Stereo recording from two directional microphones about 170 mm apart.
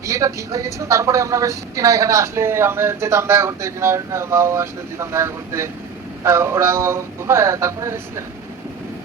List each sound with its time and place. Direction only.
0.0 s speech: 20° right (ahead or behind)